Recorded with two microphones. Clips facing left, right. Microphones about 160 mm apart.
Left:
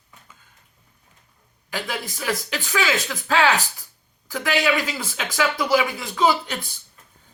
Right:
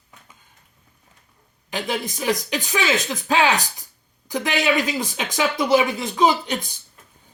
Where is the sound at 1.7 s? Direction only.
20° right (ahead or behind).